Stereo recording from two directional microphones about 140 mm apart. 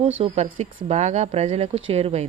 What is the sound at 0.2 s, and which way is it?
A woman's voice, 45° right (ahead or behind).